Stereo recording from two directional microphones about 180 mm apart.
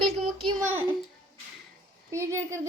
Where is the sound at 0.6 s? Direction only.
10° right (ahead or behind).